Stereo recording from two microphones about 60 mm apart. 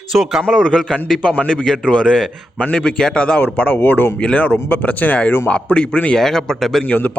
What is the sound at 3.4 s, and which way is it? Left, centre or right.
Speech, left.